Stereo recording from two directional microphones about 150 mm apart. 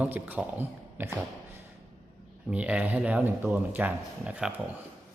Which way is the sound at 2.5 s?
10° right (ahead or behind).